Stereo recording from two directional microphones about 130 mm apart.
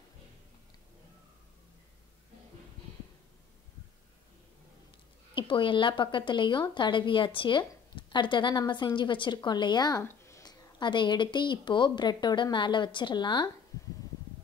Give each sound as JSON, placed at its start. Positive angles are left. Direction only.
{"t": 5.3, "sound": "a woman's voice", "side_deg": 40}
{"t": 10.0, "sound": "a woman's voice", "side_deg": 20}
{"t": 13.7, "sound": "a sound", "side_deg": 25}